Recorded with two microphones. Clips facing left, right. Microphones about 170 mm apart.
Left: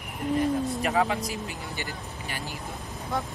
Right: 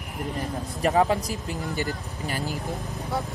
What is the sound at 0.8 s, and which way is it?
Speech, 35° right (ahead or behind).